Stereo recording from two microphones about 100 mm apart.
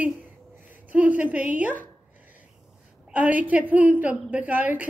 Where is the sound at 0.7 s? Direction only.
15° right (ahead or behind).